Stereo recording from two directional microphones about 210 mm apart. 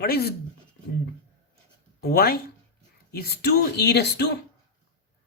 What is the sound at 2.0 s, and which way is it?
Speech, 45° left (ahead or behind).